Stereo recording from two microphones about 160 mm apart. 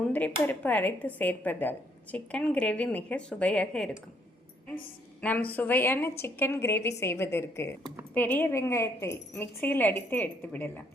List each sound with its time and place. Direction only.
0.1 s speech: 10° left (ahead or behind)
5.2 s speech: 10° left (ahead or behind)